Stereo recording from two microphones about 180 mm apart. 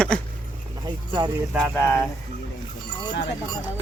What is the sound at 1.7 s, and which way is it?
Speech, 10° left (ahead or behind).